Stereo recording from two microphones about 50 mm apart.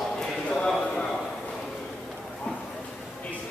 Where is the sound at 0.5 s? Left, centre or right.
Centre.